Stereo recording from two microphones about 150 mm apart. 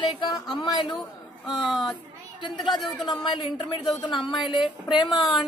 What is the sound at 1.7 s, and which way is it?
A woman's voice, centre (ahead or behind).